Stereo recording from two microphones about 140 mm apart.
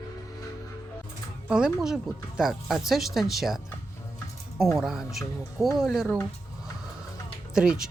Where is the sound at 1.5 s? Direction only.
5° right (ahead or behind).